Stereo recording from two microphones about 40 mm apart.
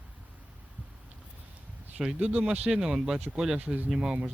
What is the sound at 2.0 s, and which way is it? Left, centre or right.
Speech, centre.